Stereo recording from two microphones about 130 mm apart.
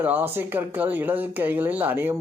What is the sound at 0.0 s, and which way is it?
Speech, 15° right (ahead or behind).